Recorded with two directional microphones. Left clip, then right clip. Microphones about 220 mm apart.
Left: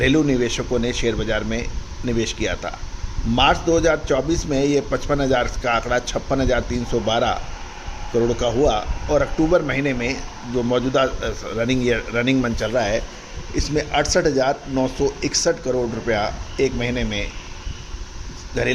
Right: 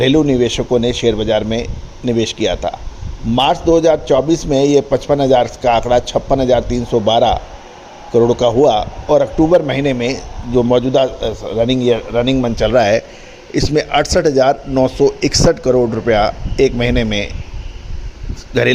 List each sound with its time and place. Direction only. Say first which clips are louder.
0.3 s speech: right 7 dB; 25° right (ahead or behind)
18.5 s speech: right 8 dB; 40° right (ahead or behind)